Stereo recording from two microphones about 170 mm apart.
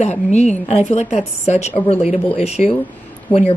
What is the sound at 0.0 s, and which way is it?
Speech, 40° left (ahead or behind).